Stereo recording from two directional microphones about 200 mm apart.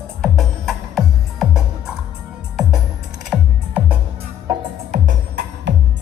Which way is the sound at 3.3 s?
5° right (ahead or behind).